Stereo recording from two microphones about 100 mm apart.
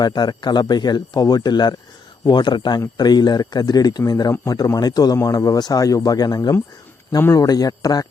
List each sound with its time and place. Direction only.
0.0 s speech: 45° left (ahead or behind)
7.2 s speech: 25° left (ahead or behind)
7.4 s speech: 40° left (ahead or behind)